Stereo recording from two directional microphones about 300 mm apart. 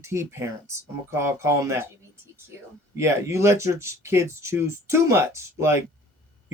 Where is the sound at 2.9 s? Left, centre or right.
Centre.